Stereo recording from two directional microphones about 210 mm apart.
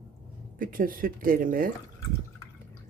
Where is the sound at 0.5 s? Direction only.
40° right (ahead or behind).